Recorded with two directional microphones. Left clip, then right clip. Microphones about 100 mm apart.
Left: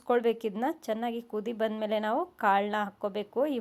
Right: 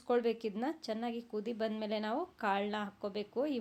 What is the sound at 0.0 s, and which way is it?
Speech, 45° left (ahead or behind).